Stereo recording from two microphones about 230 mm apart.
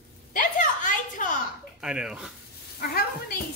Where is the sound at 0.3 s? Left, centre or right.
Left.